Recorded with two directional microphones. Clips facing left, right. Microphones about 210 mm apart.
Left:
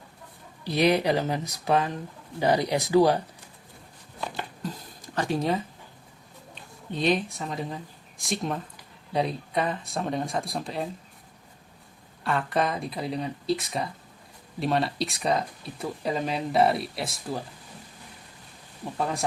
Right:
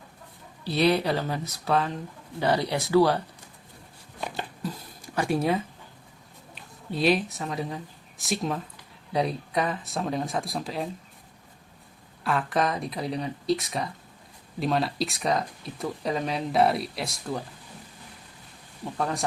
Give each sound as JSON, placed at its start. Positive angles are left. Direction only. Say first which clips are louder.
{"t": 0.6, "sound": "speech", "louder": "left 1 dB", "side_deg": 15}
{"t": 5.1, "sound": "speech", "louder": "right 1 dB", "side_deg": -10}
{"t": 12.2, "sound": "speech", "louder": "even", "side_deg": 0}
{"t": 18.9, "sound": "speech", "louder": "even", "side_deg": 0}